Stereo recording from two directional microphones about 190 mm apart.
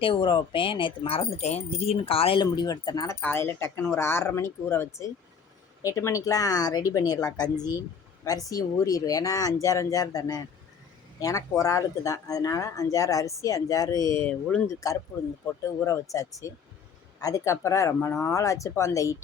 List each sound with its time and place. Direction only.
0.0 s speech: 25° left (ahead or behind)